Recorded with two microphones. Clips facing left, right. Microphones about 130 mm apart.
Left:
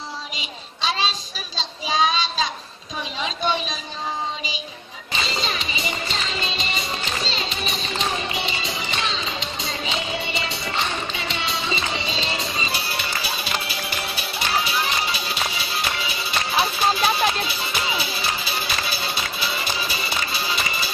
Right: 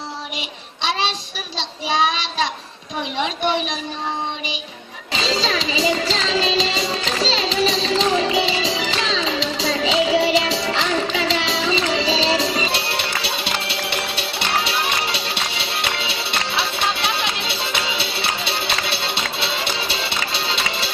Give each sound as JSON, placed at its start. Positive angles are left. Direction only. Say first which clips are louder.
{"t": 0.4, "sound": "child singing", "louder": "right 2 dB", "side_deg": -65}
{"t": 5.1, "sound": "music", "louder": "right 6 dB", "side_deg": -90}